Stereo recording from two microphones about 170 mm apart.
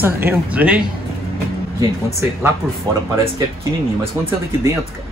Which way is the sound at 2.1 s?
15° right (ahead or behind).